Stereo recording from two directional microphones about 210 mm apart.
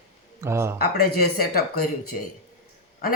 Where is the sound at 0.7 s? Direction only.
45° left (ahead or behind).